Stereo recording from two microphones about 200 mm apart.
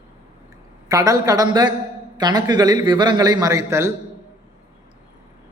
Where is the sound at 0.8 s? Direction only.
15° right (ahead or behind).